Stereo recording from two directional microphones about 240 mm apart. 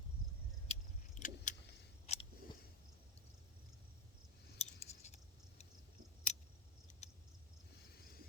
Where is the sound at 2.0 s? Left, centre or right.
Left.